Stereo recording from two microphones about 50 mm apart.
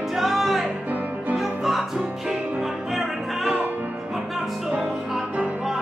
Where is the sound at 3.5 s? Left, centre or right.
Right.